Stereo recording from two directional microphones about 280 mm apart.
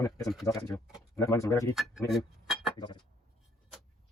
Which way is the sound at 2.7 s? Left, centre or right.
Centre.